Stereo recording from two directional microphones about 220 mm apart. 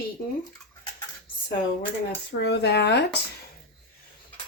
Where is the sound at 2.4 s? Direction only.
50° left (ahead or behind).